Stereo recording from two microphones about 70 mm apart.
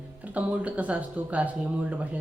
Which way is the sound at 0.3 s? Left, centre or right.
Right.